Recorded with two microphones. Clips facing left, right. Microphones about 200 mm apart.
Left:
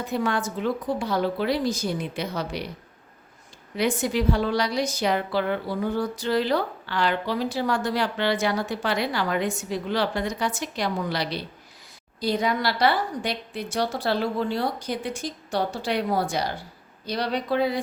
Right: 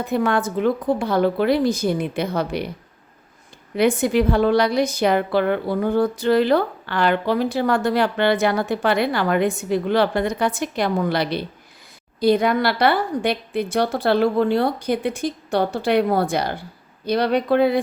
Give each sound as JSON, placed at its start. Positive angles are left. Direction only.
{"t": 0.1, "sound": "a woman's voice", "side_deg": -55}
{"t": 3.8, "sound": "a woman's voice", "side_deg": -60}